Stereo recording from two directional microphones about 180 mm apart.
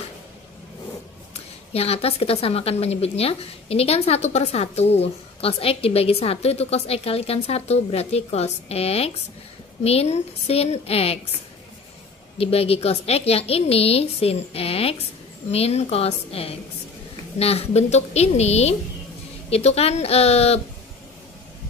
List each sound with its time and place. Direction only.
1.3 s a woman's voice: 35° left (ahead or behind)
12.4 s a woman's voice: 35° left (ahead or behind)